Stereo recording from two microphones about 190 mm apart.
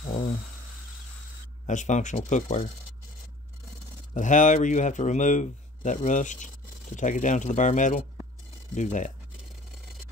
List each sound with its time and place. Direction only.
0.1 s speech: 35° left (ahead or behind)
1.7 s a man's voice: 40° left (ahead or behind)
4.1 s a man's voice: 40° left (ahead or behind)